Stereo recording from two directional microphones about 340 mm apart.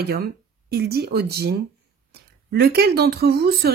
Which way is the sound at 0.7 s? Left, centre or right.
Right.